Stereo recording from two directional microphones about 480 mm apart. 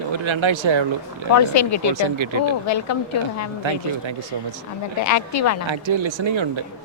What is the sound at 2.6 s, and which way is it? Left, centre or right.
Speech, left.